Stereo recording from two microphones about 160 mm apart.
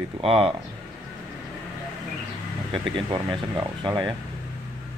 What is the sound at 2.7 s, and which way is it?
Speech, 30° right (ahead or behind).